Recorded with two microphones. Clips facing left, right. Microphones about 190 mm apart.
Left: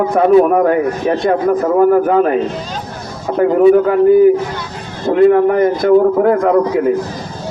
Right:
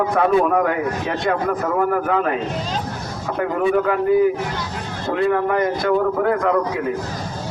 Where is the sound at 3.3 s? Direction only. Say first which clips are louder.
Left 10 dB; 35° left (ahead or behind).